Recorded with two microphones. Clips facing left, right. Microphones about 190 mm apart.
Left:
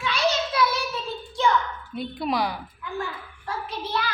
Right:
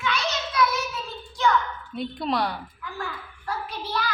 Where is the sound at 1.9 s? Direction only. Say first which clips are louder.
Even; centre (ahead or behind).